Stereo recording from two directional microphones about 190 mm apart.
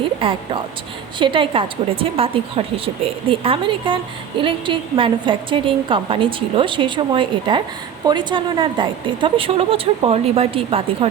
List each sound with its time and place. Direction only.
0.0 s a woman's voice: 25° right (ahead or behind)